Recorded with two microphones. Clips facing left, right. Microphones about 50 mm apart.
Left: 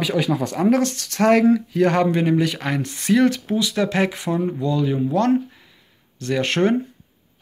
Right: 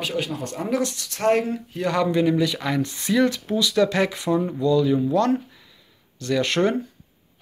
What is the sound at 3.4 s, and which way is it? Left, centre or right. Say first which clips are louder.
Speech: right 1 dB; left.